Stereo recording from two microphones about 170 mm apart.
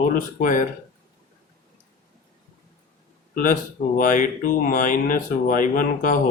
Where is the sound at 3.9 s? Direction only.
50° left (ahead or behind).